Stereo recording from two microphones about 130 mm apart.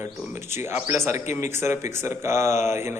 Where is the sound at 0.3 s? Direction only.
20° right (ahead or behind).